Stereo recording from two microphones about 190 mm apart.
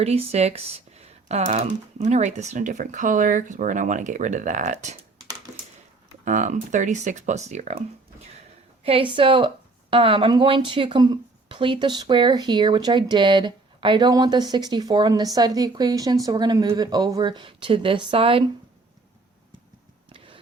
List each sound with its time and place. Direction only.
0.0 s speech: 35° right (ahead or behind)
6.2 s speech: 40° right (ahead or behind)
20.1 s a sound: 25° right (ahead or behind)